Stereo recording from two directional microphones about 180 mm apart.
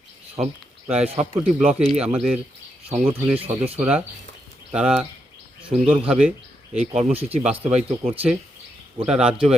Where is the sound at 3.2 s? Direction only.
10° right (ahead or behind).